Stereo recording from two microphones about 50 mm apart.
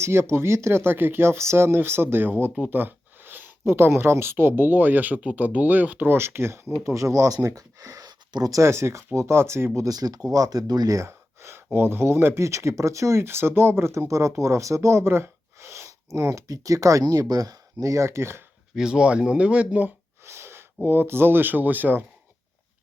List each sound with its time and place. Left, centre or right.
0.0 s speech: right
6.0 s speech: right
8.5 s speech: right
9.1 s speech: right
10.0 s speech: right
12.4 s speech: right
16.1 s speech: right
18.8 s speech: centre
20.2 s a sound: right
20.8 s speech: right